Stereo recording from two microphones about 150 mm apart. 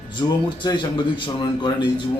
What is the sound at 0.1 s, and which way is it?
A man's voice, 30° left (ahead or behind).